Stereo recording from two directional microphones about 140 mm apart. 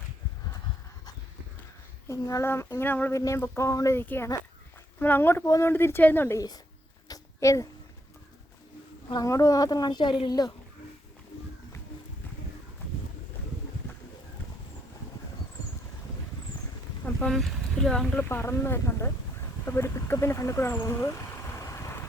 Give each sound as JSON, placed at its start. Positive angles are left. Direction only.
{"t": 2.0, "sound": "speech", "side_deg": 20}
{"t": 7.1, "sound": "a sound", "side_deg": 25}
{"t": 9.0, "sound": "speech", "side_deg": 25}
{"t": 17.2, "sound": "speech", "side_deg": 0}
{"t": 18.3, "sound": "speech", "side_deg": 15}